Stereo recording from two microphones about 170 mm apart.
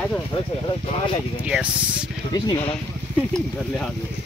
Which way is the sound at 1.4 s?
10° right (ahead or behind).